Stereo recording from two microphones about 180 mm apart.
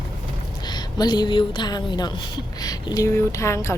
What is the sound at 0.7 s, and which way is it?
A woman's voice, 25° left (ahead or behind).